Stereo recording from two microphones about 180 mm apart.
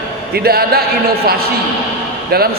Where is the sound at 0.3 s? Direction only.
60° right (ahead or behind).